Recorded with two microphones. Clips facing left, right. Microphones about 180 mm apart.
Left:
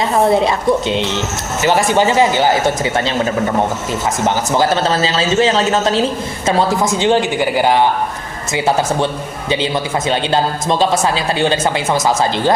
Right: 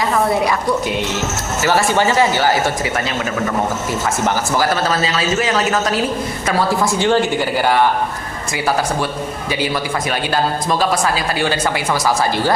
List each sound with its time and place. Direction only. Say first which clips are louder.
0.1 s speech: left 5 dB; 25° left (ahead or behind)
4.5 s speech: left 4 dB; 25° left (ahead or behind)
10.1 s speech: left 3 dB; 25° left (ahead or behind)